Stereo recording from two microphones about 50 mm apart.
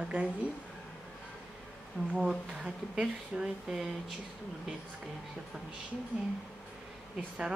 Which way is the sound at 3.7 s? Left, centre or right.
Centre.